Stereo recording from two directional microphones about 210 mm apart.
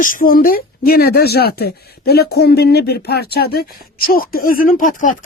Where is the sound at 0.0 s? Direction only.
40° left (ahead or behind).